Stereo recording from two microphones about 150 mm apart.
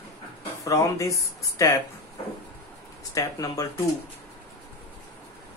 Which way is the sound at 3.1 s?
20° left (ahead or behind).